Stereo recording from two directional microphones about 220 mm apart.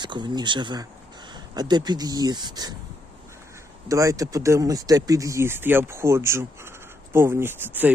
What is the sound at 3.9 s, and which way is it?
Speech, 15° right (ahead or behind).